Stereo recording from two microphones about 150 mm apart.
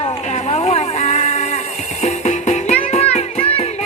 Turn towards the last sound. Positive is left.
turn(degrees=40)  # may be behind; listen again after turning